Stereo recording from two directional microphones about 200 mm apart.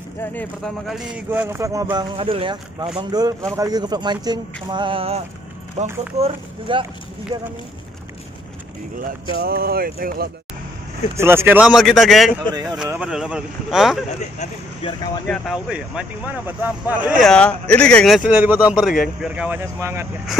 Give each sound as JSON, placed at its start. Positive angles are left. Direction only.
{"t": 0.2, "sound": "speech", "side_deg": 10}
{"t": 2.1, "sound": "speech", "side_deg": -25}
{"t": 9.4, "sound": "speech", "side_deg": -50}
{"t": 11.1, "sound": "speech", "side_deg": -10}
{"t": 14.4, "sound": "speech", "side_deg": 30}
{"t": 15.2, "sound": "speech", "side_deg": 5}
{"t": 17.3, "sound": "speech", "side_deg": 5}